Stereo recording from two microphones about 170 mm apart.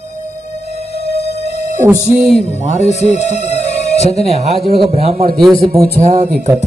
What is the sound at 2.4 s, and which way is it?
Speech, 40° left (ahead or behind).